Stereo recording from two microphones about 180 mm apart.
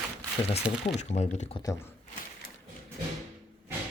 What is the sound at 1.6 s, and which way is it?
Speech, 20° left (ahead or behind).